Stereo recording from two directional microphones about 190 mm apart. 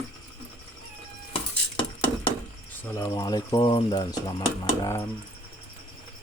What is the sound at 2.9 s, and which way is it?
Speech, 20° left (ahead or behind).